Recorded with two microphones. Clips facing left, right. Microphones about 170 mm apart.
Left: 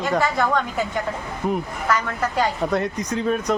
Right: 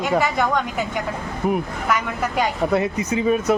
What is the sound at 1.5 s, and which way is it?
A man's voice, 10° right (ahead or behind).